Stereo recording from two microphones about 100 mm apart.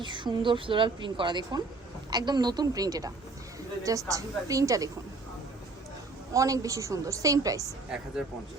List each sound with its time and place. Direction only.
0.0 s a woman's voice: 50° right (ahead or behind); by 4.9 s 35° right (ahead or behind)
6.3 s a woman's voice: 35° right (ahead or behind)
7.9 s speech: 10° right (ahead or behind)